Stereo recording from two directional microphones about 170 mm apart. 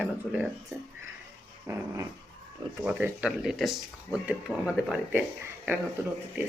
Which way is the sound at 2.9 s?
10° right (ahead or behind).